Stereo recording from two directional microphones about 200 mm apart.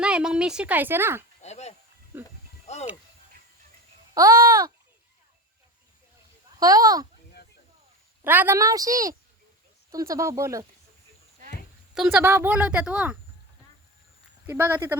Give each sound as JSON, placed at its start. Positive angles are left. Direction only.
{"t": 0.0, "sound": "a woman's voice", "side_deg": -5}
{"t": 1.4, "sound": "a sound", "side_deg": 35}
{"t": 2.1, "sound": "speech", "side_deg": -10}
{"t": 2.7, "sound": "speech", "side_deg": 35}
{"t": 4.1, "sound": "speech", "side_deg": -15}
{"t": 6.6, "sound": "speech", "side_deg": -20}
{"t": 8.2, "sound": "speech", "side_deg": -10}
{"t": 11.9, "sound": "speech", "side_deg": -5}
{"t": 14.4, "sound": "speech", "side_deg": -10}